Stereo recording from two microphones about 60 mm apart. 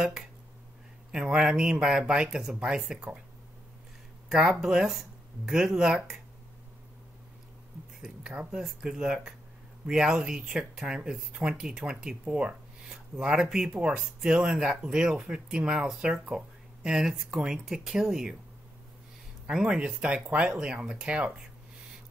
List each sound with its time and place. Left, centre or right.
0.0 s speech: centre
4.3 s speech: centre
8.0 s speech: centre
19.4 s speech: centre